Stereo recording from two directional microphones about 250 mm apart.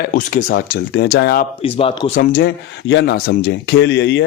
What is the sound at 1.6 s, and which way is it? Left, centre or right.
Speech, left.